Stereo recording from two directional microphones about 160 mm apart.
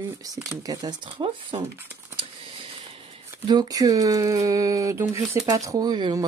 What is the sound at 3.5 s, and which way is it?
Speech, 25° right (ahead or behind).